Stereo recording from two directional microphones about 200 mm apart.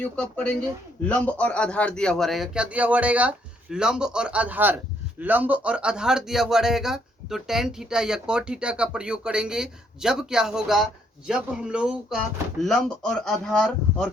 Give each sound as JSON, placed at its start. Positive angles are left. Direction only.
{"t": 0.0, "sound": "speech", "side_deg": 5}